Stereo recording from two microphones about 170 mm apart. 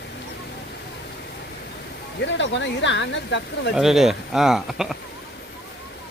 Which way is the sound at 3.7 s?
Centre (ahead or behind).